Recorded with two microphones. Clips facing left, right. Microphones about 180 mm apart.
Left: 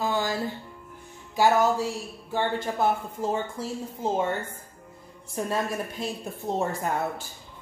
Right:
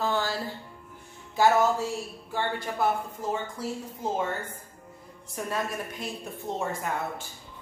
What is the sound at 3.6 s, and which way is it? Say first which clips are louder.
Speech: even; 25° left (ahead or behind).